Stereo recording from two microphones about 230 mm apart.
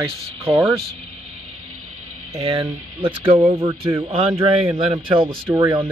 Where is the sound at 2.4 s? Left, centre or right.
Centre.